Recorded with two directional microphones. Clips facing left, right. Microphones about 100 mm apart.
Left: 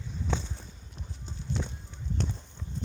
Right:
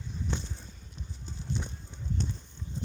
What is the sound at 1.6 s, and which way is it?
Clip-clop, 90° left.